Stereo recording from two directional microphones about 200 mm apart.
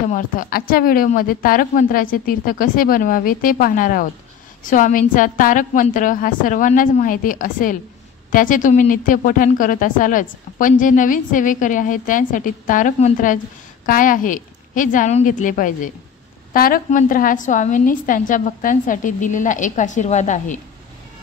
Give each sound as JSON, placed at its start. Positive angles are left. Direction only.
{"t": 0.1, "sound": "a woman's voice", "side_deg": 45}